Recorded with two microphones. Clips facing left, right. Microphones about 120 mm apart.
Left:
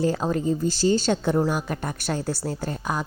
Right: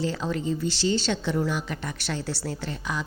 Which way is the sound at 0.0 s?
45° left (ahead or behind).